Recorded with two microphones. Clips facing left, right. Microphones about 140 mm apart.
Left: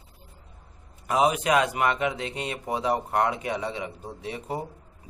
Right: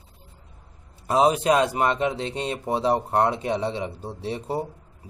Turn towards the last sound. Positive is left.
turn(degrees=-30)  # may be behind; listen again after turning